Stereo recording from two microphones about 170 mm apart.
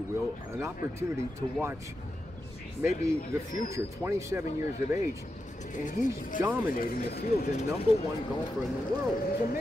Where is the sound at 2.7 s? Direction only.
15° right (ahead or behind).